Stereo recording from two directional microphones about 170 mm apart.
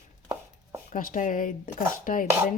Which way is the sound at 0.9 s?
50° left (ahead or behind).